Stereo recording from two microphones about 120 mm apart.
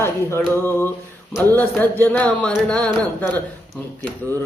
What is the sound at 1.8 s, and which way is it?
Speech, 15° left (ahead or behind).